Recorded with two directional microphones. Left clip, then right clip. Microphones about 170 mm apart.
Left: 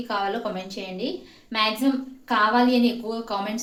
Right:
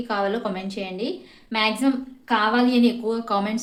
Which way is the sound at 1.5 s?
45° right (ahead or behind).